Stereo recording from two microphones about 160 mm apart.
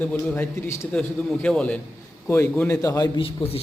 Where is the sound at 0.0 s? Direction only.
10° left (ahead or behind).